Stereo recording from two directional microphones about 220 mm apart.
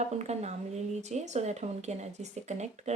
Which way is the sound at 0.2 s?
30° right (ahead or behind).